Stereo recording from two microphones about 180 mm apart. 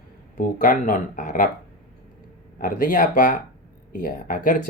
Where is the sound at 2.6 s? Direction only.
50° left (ahead or behind).